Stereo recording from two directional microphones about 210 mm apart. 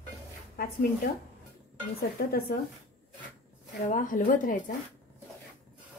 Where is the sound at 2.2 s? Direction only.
50° left (ahead or behind).